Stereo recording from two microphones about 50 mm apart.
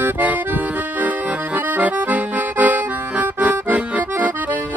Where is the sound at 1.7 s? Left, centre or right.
Right.